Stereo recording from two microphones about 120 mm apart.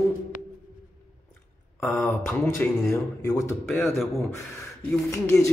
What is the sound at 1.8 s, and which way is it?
Speech, 15° left (ahead or behind).